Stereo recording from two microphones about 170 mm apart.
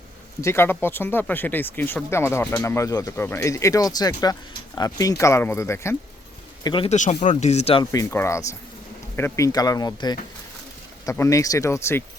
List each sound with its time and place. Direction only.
0.4 s speech: 15° left (ahead or behind)
6.7 s speech: 30° left (ahead or behind)
6.9 s speech: 40° left (ahead or behind)
7.9 s speech: 15° left (ahead or behind)